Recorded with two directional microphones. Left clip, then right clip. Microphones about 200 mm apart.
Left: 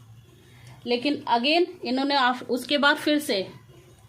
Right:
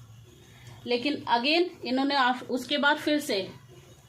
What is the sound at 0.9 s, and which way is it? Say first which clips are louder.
Speech: left 2 dB; 50° left (ahead or behind).